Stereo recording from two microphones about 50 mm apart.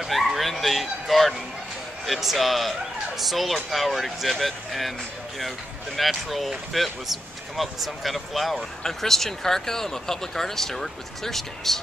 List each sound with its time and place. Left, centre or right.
0.0 s speech: centre
5.9 s speech: centre